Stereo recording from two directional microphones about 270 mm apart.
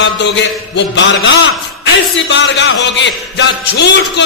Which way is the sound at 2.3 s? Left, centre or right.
Left.